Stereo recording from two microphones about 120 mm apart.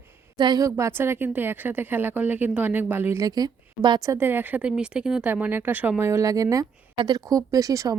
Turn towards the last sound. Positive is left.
turn(degrees=-25)  # may be behind; listen again after turning